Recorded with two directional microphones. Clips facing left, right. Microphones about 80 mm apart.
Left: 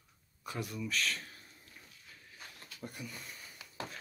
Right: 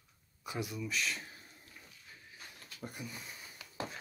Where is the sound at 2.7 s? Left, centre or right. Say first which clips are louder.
Right 1 dB; centre.